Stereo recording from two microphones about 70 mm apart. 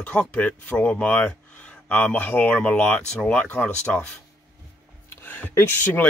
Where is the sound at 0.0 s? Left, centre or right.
Centre.